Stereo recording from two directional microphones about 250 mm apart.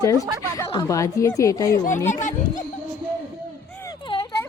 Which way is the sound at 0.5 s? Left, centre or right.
Centre.